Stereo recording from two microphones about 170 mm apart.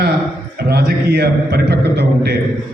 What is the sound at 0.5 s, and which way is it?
A man's voice, 75° right (ahead or behind).